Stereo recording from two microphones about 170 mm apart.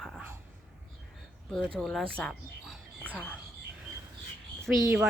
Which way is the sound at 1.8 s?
5° left (ahead or behind).